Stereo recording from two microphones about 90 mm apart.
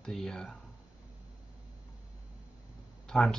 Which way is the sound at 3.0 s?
5° left (ahead or behind).